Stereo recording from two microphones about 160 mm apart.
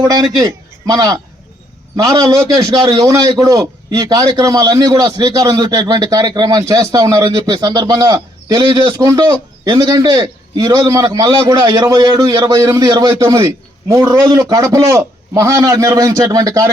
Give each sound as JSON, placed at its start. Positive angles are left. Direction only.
{"t": 0.0, "sound": "a man's voice", "side_deg": -25}